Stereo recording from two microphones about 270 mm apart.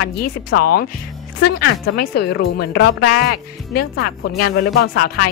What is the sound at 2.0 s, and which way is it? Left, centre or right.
Speech, left.